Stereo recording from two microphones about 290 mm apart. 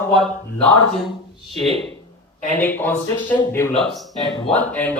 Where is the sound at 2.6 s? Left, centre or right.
Centre.